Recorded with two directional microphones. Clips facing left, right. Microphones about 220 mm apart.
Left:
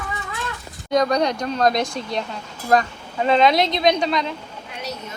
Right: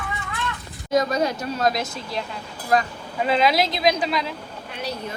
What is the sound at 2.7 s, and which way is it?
Speech, 45° left (ahead or behind).